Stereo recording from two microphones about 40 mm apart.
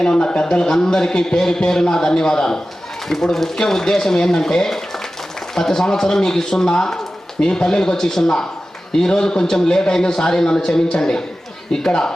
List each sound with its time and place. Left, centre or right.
0.0 s a man's voice: left